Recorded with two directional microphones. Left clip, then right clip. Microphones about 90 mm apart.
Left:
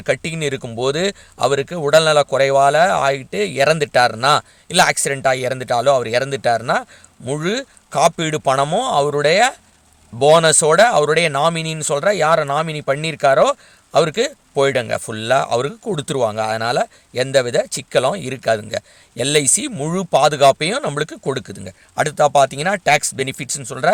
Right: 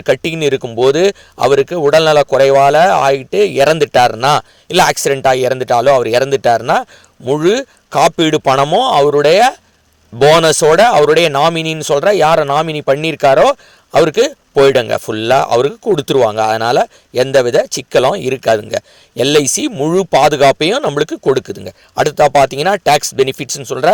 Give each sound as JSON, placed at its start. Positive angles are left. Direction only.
{"t": 0.0, "sound": "speech", "side_deg": -30}
{"t": 10.2, "sound": "speech", "side_deg": -40}